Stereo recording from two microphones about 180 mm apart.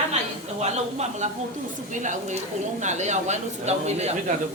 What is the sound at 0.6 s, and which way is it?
Speech, 40° right (ahead or behind).